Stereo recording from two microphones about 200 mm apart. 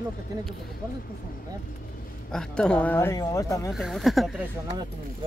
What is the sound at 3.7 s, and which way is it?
Speech, centre (ahead or behind).